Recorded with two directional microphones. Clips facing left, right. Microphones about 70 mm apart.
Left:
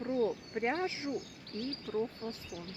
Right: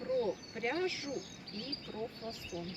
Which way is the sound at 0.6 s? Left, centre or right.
Left.